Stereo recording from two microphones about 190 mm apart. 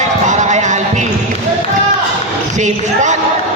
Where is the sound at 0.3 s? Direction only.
40° right (ahead or behind).